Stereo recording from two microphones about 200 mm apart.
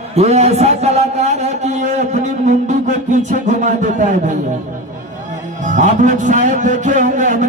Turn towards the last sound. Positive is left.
turn(degrees=-40)  # may be behind; listen again after turning